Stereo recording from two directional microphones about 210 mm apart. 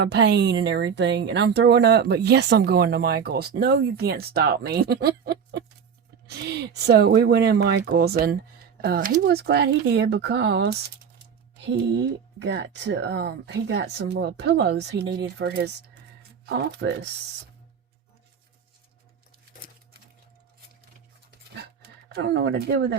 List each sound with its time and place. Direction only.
0.0 s speech: 55° right (ahead or behind)
4.8 s a sound: 50° right (ahead or behind)
6.2 s speech: 50° right (ahead or behind)
21.8 s speech: 55° right (ahead or behind)